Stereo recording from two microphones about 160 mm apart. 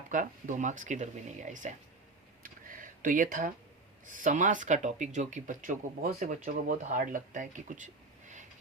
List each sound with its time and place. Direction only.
0.1 s speech: 55° right (ahead or behind)
2.4 s tick: 60° right (ahead or behind)
4.0 s speech: 55° right (ahead or behind)